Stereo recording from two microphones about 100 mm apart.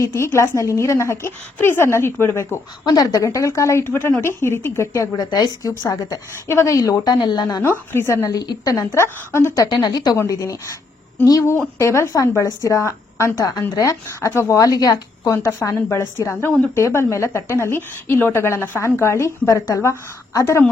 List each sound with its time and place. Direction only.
0.0 s a woman's voice: 25° left (ahead or behind)
2.8 s a woman's voice: 40° left (ahead or behind); by 5.0 s 25° left (ahead or behind)
5.1 s a woman's voice: 40° left (ahead or behind); by 9.6 s 25° left (ahead or behind)
9.6 s a woman's voice: 45° left (ahead or behind)
15.3 s a woman's voice: 25° left (ahead or behind)